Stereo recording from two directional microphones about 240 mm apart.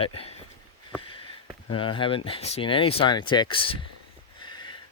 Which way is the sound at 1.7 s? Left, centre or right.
Left.